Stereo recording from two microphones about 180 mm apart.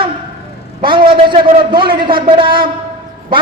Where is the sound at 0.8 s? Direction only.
25° right (ahead or behind).